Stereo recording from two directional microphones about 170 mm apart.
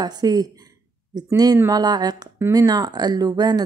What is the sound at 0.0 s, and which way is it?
Speech, 25° right (ahead or behind).